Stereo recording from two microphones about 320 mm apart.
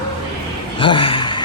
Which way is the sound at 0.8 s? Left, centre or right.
Centre.